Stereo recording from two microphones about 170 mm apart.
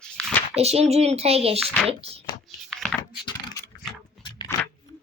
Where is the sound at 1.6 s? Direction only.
5° left (ahead or behind).